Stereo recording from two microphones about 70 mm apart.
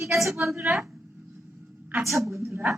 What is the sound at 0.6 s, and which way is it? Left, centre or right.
Speech, centre.